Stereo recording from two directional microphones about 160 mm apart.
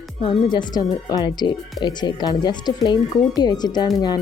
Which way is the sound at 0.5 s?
25° left (ahead or behind).